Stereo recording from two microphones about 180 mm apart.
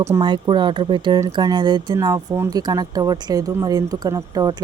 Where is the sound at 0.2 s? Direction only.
25° right (ahead or behind).